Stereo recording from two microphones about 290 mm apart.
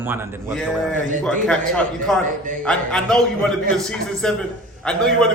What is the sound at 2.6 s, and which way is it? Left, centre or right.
A man's voice, centre.